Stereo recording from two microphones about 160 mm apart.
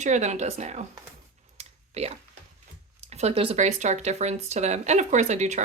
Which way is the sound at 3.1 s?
40° right (ahead or behind).